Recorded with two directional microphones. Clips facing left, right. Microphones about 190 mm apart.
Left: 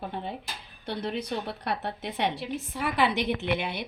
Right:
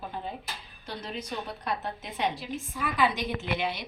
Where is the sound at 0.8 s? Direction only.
60° left (ahead or behind).